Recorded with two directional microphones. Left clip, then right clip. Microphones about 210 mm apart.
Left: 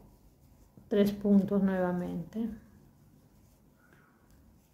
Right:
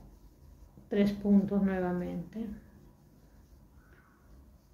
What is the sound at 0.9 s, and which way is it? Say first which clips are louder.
A woman's voice: left 2 dB; 30° left (ahead or behind).